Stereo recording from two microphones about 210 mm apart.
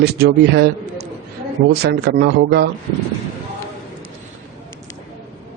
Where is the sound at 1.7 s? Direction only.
50° right (ahead or behind).